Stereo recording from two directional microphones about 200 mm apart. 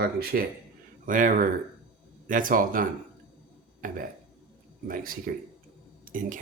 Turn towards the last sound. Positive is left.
turn(degrees=-40)  # may be behind; listen again after turning